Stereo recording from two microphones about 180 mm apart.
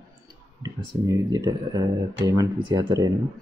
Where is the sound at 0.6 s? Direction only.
20° right (ahead or behind).